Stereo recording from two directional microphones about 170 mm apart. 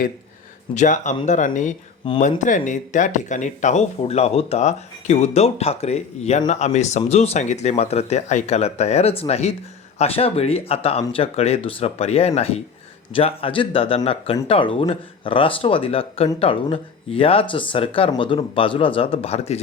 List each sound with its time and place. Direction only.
0.7 s speech: 45° left (ahead or behind)
2.0 s speech: 30° left (ahead or behind)
2.4 s speech: 50° left (ahead or behind)